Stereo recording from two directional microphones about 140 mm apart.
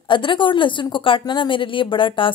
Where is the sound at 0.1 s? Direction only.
35° left (ahead or behind).